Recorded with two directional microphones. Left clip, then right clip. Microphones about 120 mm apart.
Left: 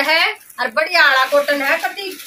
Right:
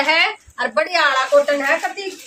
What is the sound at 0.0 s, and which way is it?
Speech, 15° right (ahead or behind).